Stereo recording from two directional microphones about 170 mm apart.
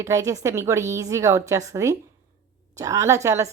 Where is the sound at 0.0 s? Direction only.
20° right (ahead or behind).